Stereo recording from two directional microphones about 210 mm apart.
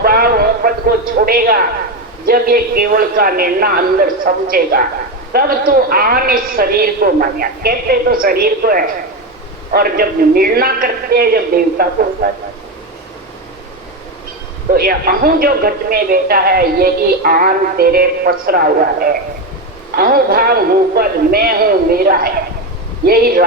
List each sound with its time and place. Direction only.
0.0 s a sound: 45° right (ahead or behind)
2.2 s speech: 45° right (ahead or behind)
14.7 s speech: 45° right (ahead or behind)